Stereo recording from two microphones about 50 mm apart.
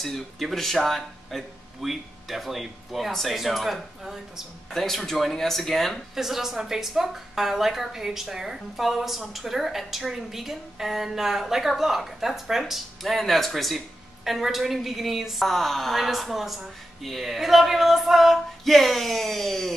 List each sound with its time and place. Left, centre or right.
0.0 s speech: centre
4.6 s speech: centre